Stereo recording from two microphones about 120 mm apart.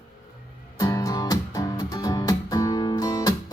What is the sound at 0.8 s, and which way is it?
Music, 30° left (ahead or behind).